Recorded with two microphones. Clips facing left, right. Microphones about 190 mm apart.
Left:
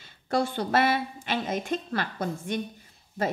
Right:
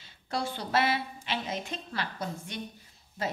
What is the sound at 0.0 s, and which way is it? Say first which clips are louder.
A woman's voice: left 7 dB; 50° left (ahead or behind).